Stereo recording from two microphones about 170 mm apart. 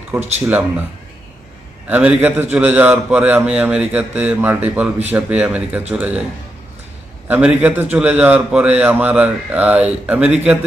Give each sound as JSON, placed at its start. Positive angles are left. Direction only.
{"t": 0.2, "sound": "speech", "side_deg": -40}
{"t": 1.9, "sound": "a man's voice", "side_deg": -10}
{"t": 7.3, "sound": "a man's voice", "side_deg": -10}